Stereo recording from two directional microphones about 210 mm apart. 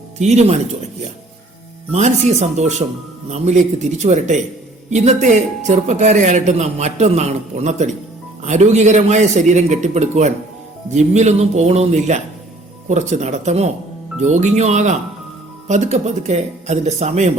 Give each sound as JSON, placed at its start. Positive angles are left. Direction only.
{"t": 0.2, "sound": "a man's voice", "side_deg": -30}
{"t": 1.9, "sound": "a man's voice", "side_deg": -35}